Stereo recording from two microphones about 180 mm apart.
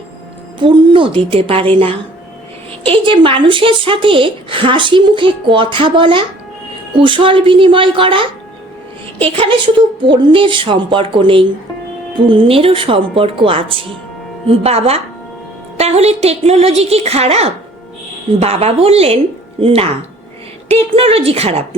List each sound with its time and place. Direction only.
0.6 s a woman's voice: 30° right (ahead or behind)